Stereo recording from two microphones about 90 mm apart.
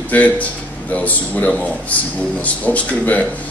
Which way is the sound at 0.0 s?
15° left (ahead or behind).